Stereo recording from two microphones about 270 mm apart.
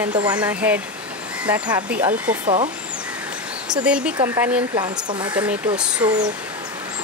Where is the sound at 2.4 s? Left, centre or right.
Centre.